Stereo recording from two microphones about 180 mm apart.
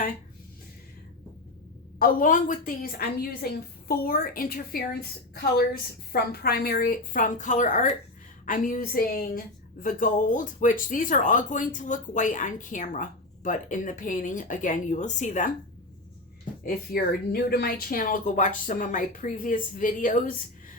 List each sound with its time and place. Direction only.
2.0 s a woman's voice: 50° left (ahead or behind)
16.6 s a woman's voice: 55° left (ahead or behind)